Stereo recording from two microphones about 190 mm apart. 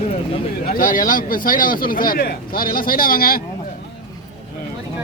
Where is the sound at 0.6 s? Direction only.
45° left (ahead or behind).